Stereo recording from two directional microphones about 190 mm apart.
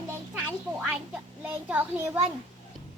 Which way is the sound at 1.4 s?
10° right (ahead or behind).